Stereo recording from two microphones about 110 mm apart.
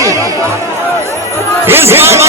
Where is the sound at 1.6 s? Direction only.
20° right (ahead or behind).